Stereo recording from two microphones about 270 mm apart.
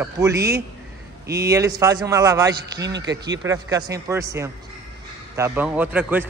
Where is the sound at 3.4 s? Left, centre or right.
Centre.